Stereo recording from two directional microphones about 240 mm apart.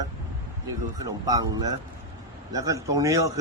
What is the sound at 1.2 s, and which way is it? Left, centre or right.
Speech, centre.